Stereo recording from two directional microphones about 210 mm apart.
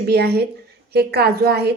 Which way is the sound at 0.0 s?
50° right (ahead or behind).